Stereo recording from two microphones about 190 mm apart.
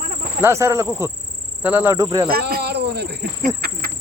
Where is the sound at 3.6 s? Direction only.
50° right (ahead or behind).